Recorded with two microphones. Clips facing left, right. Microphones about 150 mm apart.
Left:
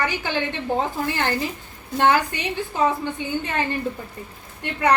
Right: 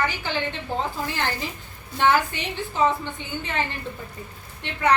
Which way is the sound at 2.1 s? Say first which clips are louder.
Left 1 dB; 15° left (ahead or behind).